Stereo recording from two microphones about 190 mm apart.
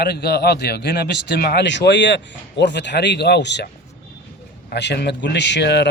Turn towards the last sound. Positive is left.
turn(degrees=65)  # may be behind; listen again after turning